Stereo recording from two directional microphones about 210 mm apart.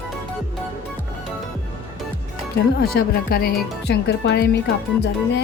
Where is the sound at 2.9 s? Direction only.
45° left (ahead or behind).